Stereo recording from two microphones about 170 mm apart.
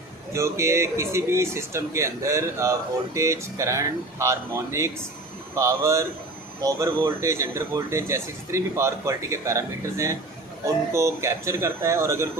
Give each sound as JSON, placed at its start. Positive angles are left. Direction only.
{"t": 0.3, "sound": "a man's voice", "side_deg": -15}